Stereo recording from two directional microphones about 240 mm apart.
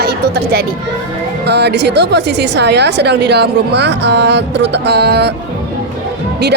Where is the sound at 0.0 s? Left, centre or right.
Right.